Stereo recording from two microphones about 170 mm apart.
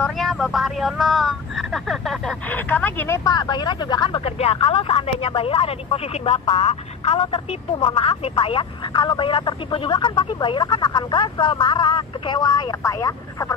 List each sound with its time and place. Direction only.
0.0 s speech: centre (ahead or behind)
3.3 s speech: 25° left (ahead or behind)